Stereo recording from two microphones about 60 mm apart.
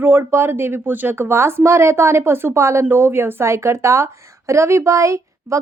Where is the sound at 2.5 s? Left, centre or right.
Right.